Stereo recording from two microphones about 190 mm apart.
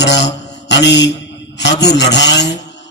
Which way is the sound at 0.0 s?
65° left (ahead or behind).